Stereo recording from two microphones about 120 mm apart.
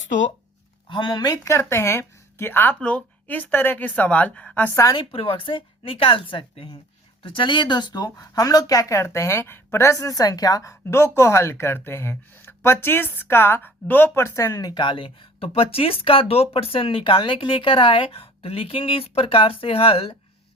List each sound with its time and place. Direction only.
0.9 s speech: 40° left (ahead or behind); by 4.8 s 15° left (ahead or behind)
4.9 s speech: 50° left (ahead or behind); by 14.7 s 30° left (ahead or behind)
14.8 s speech: 45° left (ahead or behind)